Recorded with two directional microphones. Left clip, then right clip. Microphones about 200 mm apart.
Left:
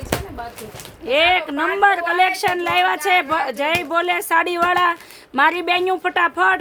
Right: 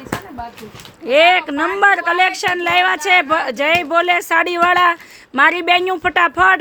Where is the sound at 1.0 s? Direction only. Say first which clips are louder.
Right 5 dB; 20° right (ahead or behind).